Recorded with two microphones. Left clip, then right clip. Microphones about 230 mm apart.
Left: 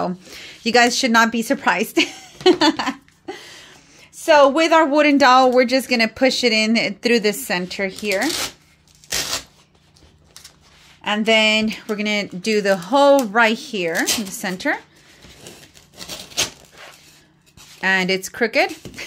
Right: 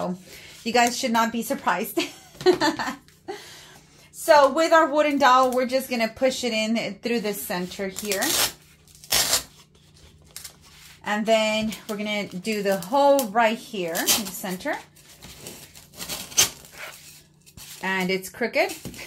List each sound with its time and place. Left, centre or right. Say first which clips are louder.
0.0 s speech: left 6 dB; left
4.2 s speech: left 4 dB; left
11.1 s speech: left 6 dB; left
17.7 s speech: left 7 dB; left